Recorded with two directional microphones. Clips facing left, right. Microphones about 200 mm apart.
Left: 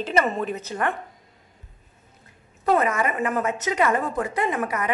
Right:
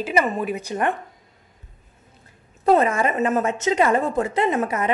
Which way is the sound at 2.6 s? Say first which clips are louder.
Right 4 dB; 30° right (ahead or behind).